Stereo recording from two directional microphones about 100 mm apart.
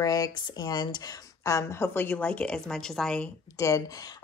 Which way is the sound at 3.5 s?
35° left (ahead or behind).